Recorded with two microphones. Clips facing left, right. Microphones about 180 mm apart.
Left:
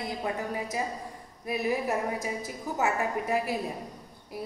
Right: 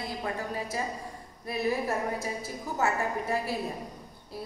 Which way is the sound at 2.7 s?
15° left (ahead or behind).